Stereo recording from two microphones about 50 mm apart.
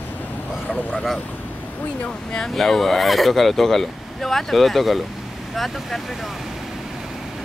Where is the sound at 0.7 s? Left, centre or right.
Centre.